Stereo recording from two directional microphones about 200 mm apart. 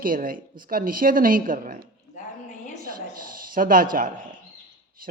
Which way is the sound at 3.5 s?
45° right (ahead or behind).